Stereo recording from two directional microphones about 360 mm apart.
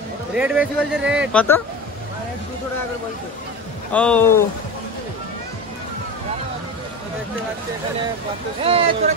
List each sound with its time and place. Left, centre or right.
0.3 s speech: centre
3.9 s speech: centre
8.6 s speech: centre